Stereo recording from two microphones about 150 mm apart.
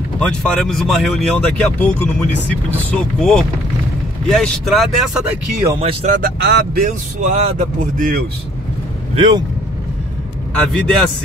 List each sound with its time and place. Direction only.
0.2 s speech: 5° left (ahead or behind)
5.8 s speech: 45° right (ahead or behind)
6.1 s speech: 80° right; by 8.2 s 65° right (ahead or behind)
9.1 s speech: 35° right (ahead or behind)
10.5 s speech: 5° left (ahead or behind)